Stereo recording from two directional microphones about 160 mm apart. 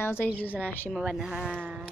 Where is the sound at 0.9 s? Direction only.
5° right (ahead or behind).